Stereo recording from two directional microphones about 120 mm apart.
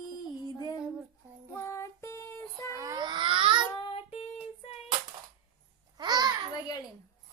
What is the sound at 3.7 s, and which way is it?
Child singing, 40° left (ahead or behind).